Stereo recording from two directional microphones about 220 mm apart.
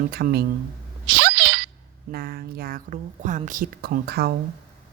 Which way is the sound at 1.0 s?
50° right (ahead or behind).